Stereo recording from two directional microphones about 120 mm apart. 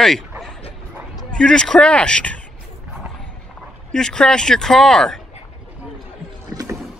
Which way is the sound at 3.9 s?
5° left (ahead or behind).